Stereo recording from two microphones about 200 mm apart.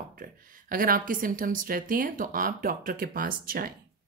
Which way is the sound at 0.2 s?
45° right (ahead or behind).